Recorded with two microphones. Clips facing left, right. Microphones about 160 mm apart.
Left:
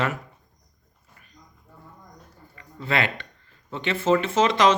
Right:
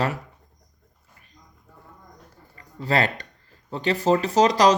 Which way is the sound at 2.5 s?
35° right (ahead or behind).